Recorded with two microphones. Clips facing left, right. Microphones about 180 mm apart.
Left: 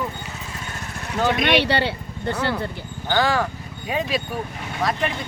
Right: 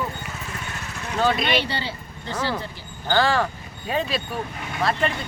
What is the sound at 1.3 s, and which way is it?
Speech, 75° left (ahead or behind).